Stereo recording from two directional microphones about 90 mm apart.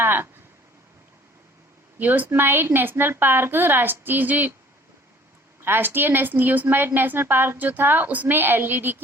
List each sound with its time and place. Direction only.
0.0 s a woman's voice: 25° right (ahead or behind)
2.0 s a woman's voice: 20° right (ahead or behind)
5.6 s a woman's voice: 25° right (ahead or behind)